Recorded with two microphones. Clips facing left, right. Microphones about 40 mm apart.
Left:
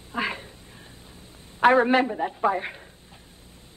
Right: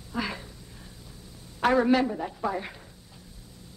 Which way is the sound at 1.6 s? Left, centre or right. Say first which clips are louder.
Left 4 dB; left.